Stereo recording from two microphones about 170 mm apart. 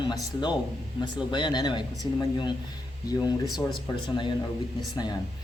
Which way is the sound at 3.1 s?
20° left (ahead or behind).